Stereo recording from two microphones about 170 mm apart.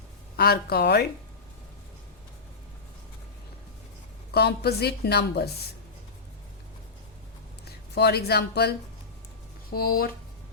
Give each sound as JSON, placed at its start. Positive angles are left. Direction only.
{"t": 0.3, "sound": "speech", "side_deg": 65}
{"t": 4.3, "sound": "a woman's voice", "side_deg": 70}
{"t": 7.9, "sound": "a woman's voice", "side_deg": 70}
{"t": 9.6, "sound": "speech", "side_deg": 60}